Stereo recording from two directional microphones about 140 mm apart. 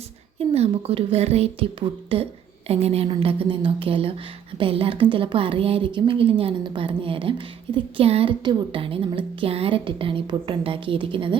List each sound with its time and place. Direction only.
0.3 s a woman's voice: 45° right (ahead or behind)